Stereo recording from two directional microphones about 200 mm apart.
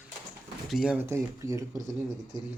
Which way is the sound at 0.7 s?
Centre (ahead or behind).